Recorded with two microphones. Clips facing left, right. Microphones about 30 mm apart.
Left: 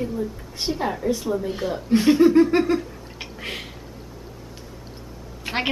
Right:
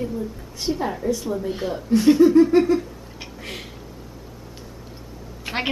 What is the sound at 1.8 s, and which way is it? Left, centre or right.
Speech, left.